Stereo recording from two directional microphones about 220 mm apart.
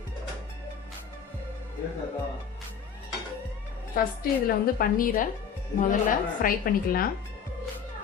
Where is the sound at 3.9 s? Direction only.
40° left (ahead or behind).